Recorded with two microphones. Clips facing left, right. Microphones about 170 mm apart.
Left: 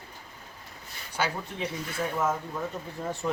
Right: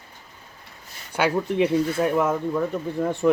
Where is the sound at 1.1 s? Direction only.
60° right (ahead or behind).